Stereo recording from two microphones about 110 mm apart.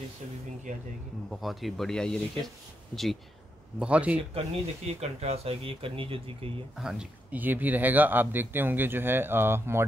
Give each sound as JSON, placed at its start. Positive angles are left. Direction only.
{"t": 1.3, "sound": "speech", "side_deg": 0}
{"t": 3.8, "sound": "speech", "side_deg": -10}
{"t": 4.3, "sound": "speech", "side_deg": -65}
{"t": 6.8, "sound": "speech", "side_deg": -5}